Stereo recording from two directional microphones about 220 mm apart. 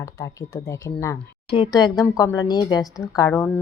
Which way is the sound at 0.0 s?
15° left (ahead or behind).